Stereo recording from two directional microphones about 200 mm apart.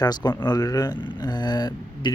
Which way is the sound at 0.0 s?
20° left (ahead or behind).